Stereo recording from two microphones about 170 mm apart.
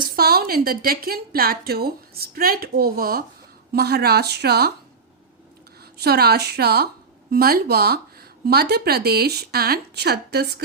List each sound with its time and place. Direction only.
0.2 s a woman's voice: 65° right (ahead or behind)
5.8 s speech: 65° right (ahead or behind)